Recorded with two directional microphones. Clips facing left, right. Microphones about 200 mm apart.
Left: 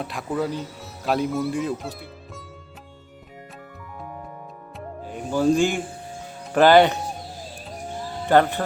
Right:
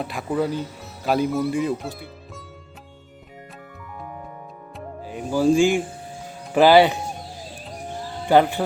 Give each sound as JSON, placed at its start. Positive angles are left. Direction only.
{"t": 0.0, "sound": "speech", "side_deg": 0}
{"t": 4.8, "sound": "music", "side_deg": -5}
{"t": 6.5, "sound": "speech", "side_deg": -5}
{"t": 8.3, "sound": "speech", "side_deg": -10}